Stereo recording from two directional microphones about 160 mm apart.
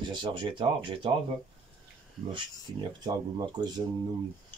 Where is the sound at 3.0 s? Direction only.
25° right (ahead or behind).